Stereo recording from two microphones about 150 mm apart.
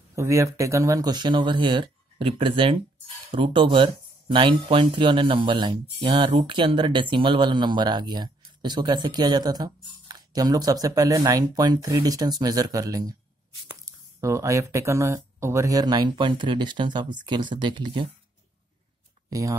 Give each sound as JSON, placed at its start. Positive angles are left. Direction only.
{"t": 0.1, "sound": "speech", "side_deg": -20}